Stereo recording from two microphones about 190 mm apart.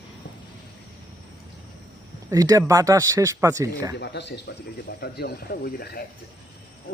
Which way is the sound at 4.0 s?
65° left (ahead or behind).